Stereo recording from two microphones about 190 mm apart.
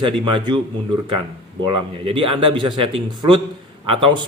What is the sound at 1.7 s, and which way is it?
Speech, 30° right (ahead or behind).